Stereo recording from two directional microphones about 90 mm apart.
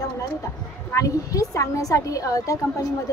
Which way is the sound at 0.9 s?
40° left (ahead or behind).